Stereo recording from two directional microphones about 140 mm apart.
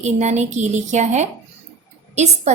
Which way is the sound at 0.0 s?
55° right (ahead or behind).